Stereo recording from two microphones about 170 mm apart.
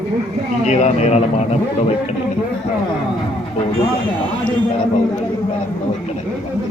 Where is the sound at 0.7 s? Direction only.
40° left (ahead or behind).